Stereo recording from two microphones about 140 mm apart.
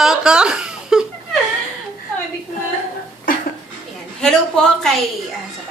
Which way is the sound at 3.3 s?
85° left.